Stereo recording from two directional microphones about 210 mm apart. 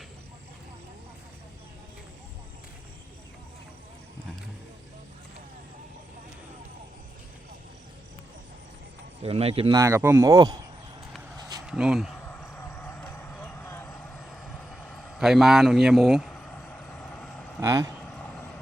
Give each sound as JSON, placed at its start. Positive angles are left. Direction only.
{"t": 9.2, "sound": "speech", "side_deg": -30}
{"t": 9.7, "sound": "speech", "side_deg": -15}
{"t": 11.6, "sound": "a sound", "side_deg": -5}
{"t": 12.4, "sound": "vehicle", "side_deg": 10}
{"t": 17.6, "sound": "speech", "side_deg": -15}
{"t": 18.1, "sound": "vehicle", "side_deg": 5}